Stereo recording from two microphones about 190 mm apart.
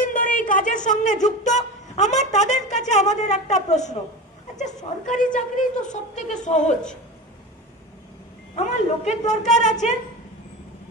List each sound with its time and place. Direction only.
0.0 s a woman's voice: 45° left (ahead or behind)
5.1 s a woman's voice: 40° left (ahead or behind)
8.6 s a woman's voice: 40° left (ahead or behind)